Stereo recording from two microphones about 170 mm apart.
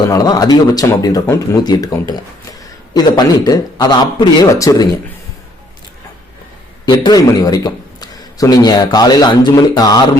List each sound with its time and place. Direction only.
0.1 s speech: 20° left (ahead or behind)
6.8 s a man's voice: 25° left (ahead or behind)